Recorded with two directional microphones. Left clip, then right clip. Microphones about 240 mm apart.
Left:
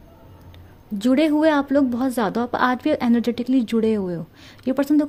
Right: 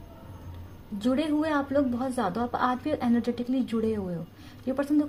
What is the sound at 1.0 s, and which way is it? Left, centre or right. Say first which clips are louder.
A woman's voice: left 9 dB; left.